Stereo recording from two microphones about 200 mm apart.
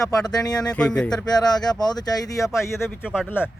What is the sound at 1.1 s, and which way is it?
Speech, 20° left (ahead or behind).